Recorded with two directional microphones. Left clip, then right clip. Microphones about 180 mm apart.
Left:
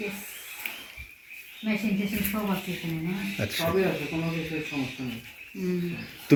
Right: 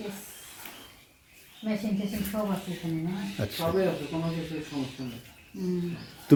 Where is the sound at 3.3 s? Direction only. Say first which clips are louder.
Left 3 dB; 10° right (ahead or behind).